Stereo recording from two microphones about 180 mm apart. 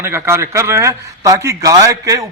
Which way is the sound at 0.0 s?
15° right (ahead or behind).